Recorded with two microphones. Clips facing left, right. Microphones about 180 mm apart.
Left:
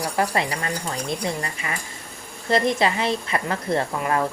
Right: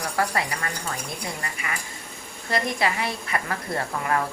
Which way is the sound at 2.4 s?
25° left (ahead or behind).